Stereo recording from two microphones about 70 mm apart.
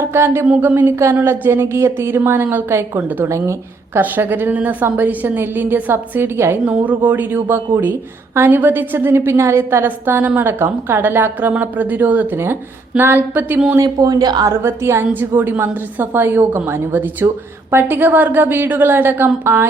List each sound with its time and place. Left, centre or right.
0.0 s a sound: right
0.6 s a woman's voice: right
0.9 s a woman's voice: right
3.2 s a woman's voice: right
4.0 s a woman's voice: right
7.0 s a woman's voice: right
13.8 s speech: right
14.4 s a woman's voice: right